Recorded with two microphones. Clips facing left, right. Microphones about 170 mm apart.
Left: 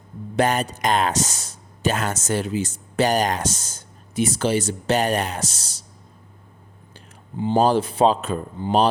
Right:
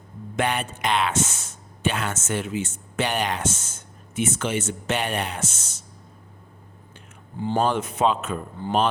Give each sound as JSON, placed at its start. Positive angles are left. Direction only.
{"t": 0.3, "sound": "speech", "side_deg": 40}
{"t": 7.5, "sound": "speech", "side_deg": 35}
{"t": 8.6, "sound": "speech", "side_deg": 20}